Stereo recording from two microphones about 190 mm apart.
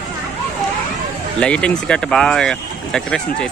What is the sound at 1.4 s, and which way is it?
Speech, 5° left (ahead or behind).